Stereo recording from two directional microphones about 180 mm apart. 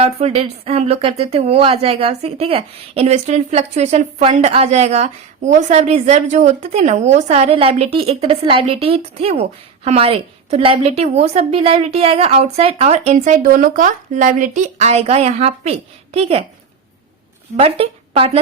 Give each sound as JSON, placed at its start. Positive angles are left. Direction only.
{"t": 0.0, "sound": "a woman's voice", "side_deg": -35}
{"t": 17.6, "sound": "a woman's voice", "side_deg": -30}